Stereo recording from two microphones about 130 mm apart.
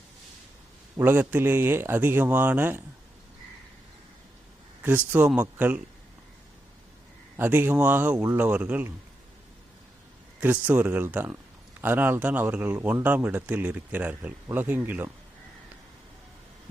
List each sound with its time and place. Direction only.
0.9 s speech: 15° right (ahead or behind)
4.8 s speech: 15° right (ahead or behind)
7.3 s speech: 15° right (ahead or behind)
10.4 s speech: 10° right (ahead or behind)